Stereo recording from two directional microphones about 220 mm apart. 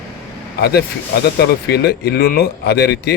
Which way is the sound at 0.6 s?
45° left (ahead or behind).